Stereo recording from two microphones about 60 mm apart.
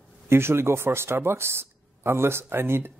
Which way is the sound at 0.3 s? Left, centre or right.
Right.